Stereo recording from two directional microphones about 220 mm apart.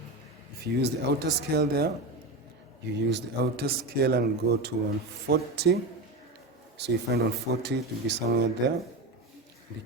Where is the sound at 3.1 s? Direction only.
45° right (ahead or behind).